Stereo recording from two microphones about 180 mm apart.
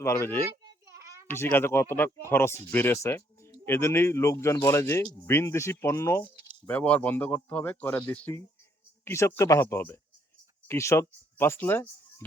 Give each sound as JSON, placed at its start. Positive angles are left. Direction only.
{"t": 0.0, "sound": "speech", "side_deg": 15}
{"t": 0.6, "sound": "a sound", "side_deg": -15}
{"t": 1.3, "sound": "speech", "side_deg": 15}